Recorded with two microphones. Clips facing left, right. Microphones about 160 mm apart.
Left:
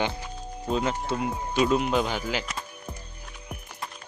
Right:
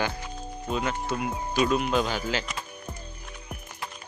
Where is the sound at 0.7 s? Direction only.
30° left (ahead or behind).